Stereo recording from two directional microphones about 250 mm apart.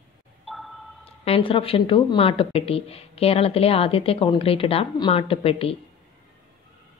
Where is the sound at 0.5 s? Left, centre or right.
Centre.